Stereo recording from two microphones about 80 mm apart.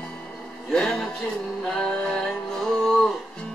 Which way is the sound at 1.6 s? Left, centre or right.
Centre.